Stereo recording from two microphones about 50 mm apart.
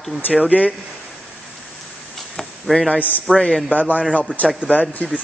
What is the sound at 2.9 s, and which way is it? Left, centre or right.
Speech, left.